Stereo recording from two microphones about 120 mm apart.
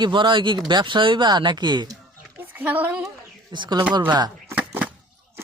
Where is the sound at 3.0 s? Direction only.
35° right (ahead or behind).